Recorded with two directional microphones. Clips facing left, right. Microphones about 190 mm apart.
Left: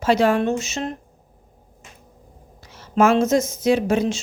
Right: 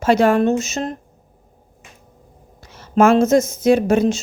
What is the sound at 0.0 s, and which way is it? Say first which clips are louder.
Speech: right 3 dB; 50° right (ahead or behind).